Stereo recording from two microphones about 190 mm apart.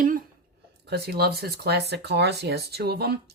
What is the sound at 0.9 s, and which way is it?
Speech, 55° right (ahead or behind).